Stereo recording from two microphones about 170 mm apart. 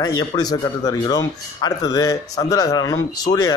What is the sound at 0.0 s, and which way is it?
Speech, 25° left (ahead or behind).